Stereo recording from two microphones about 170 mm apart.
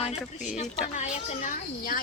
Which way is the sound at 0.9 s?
40° left (ahead or behind).